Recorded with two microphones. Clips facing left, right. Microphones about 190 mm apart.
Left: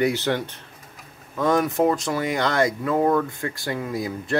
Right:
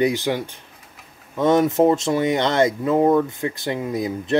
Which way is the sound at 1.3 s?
25° right (ahead or behind).